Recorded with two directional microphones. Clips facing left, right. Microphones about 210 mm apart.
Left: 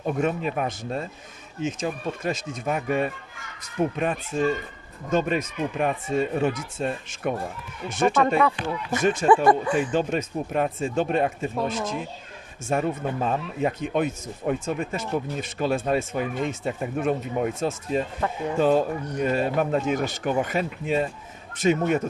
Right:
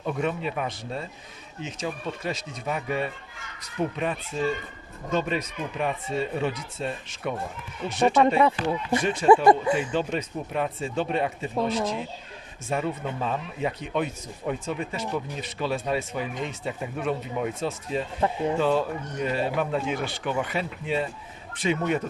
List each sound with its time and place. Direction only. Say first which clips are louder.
0.0 s speech: left 3 dB; 45° left (ahead or behind)
8.4 s speech: right 1 dB; 25° right (ahead or behind)
9.0 s speech: left 4 dB; 45° left (ahead or behind)
9.3 s speech: right 3 dB; 25° right (ahead or behind)
9.7 s speech: left 3 dB; 45° left (ahead or behind)
12.6 s speech: left 3 dB; 50° left (ahead or behind)